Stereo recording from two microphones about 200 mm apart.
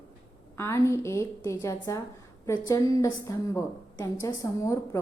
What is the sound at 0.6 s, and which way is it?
A woman's voice, 15° left (ahead or behind).